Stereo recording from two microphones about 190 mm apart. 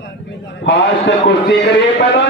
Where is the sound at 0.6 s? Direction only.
70° left (ahead or behind).